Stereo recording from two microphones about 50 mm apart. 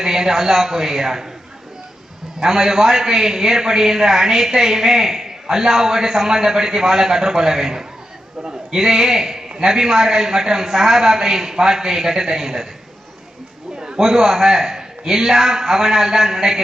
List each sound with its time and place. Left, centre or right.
0.0 s a man's voice: centre
2.4 s a man's voice: centre
13.7 s a sound: centre
14.0 s a man's voice: centre